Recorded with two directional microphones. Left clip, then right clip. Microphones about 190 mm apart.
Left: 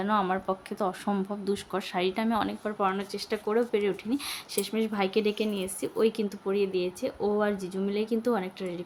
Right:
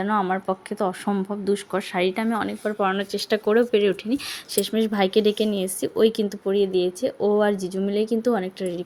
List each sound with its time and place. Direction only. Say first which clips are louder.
0.0 s speech: right 4 dB; 15° right (ahead or behind)